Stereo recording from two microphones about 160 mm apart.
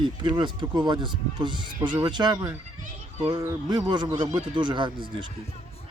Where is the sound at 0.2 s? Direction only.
30° right (ahead or behind).